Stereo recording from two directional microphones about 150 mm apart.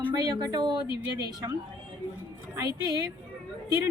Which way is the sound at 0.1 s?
25° right (ahead or behind).